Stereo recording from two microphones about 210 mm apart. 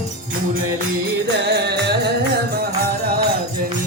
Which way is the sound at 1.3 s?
55° right (ahead or behind).